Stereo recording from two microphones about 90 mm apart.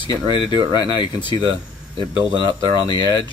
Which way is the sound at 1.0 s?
55° left (ahead or behind).